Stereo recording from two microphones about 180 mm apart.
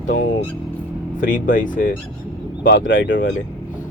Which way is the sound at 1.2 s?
45° left (ahead or behind).